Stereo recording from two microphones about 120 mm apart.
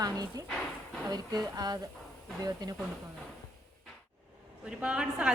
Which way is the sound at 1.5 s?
35° right (ahead or behind).